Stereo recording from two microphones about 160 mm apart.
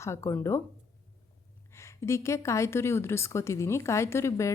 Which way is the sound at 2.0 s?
20° left (ahead or behind).